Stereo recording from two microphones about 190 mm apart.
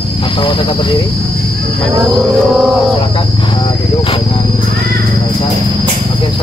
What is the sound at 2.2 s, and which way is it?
Music, 5° right (ahead or behind).